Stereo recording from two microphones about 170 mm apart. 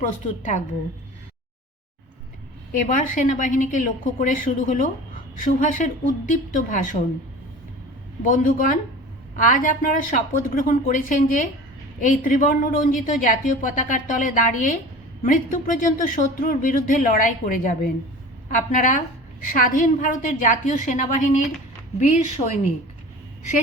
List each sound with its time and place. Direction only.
2.7 s a woman's voice: 50° left (ahead or behind)
8.2 s a woman's voice: 50° left (ahead or behind)